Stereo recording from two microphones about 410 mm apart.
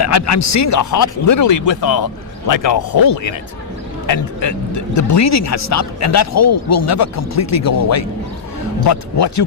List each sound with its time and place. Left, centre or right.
0.0 s speech: left
4.0 s speech: left